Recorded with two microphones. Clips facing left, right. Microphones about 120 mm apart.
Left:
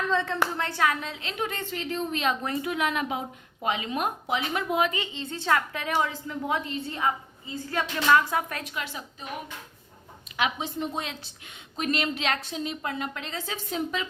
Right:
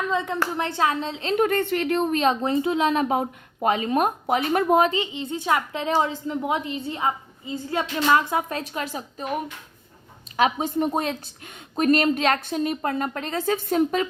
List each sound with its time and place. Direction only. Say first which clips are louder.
0.1 s a sound: left 1 dB; 15° right (ahead or behind)
0.5 s a woman's voice: right 3 dB; 20° right (ahead or behind)
1.4 s a woman's voice: right 10 dB; 50° right (ahead or behind)
2.1 s a woman's voice: right 7 dB; 35° right (ahead or behind)
3.2 s a woman's voice: right 9 dB; 45° right (ahead or behind)
4.9 s a woman's voice: right 6 dB; 20° right (ahead or behind)
8.7 s a woman's voice: right 5 dB; 40° right (ahead or behind)
10.3 s a woman's voice: right 7 dB; 40° right (ahead or behind)